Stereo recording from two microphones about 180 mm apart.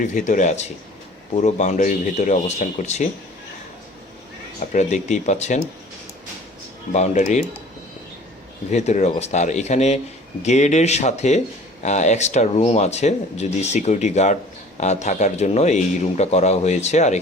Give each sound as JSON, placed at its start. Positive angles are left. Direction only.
{"t": 0.0, "sound": "speech", "side_deg": 45}
{"t": 4.7, "sound": "speech", "side_deg": 40}
{"t": 6.9, "sound": "speech", "side_deg": 40}
{"t": 8.7, "sound": "speech", "side_deg": 40}